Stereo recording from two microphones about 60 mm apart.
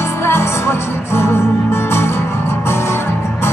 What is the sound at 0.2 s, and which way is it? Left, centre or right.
Music, left.